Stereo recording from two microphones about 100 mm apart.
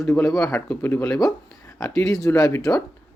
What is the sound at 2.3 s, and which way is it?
Speech, 30° left (ahead or behind).